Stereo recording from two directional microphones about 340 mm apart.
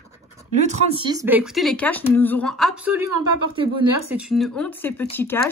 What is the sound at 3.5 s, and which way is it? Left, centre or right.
Speech, centre.